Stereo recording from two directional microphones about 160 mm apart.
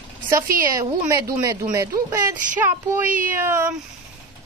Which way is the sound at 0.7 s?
20° right (ahead or behind).